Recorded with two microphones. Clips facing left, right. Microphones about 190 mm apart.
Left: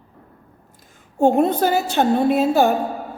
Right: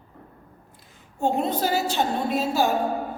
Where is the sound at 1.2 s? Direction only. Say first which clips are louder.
Left 8 dB; 55° left (ahead or behind).